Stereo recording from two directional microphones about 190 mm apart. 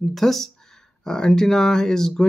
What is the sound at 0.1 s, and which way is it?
Speech, centre (ahead or behind).